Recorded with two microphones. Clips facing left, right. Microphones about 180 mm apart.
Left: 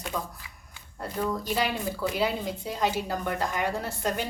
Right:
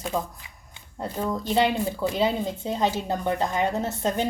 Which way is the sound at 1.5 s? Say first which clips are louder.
Right 6 dB; 25° right (ahead or behind).